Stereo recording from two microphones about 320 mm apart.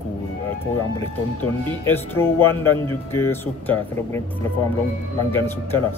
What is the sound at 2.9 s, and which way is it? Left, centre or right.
Speech, centre.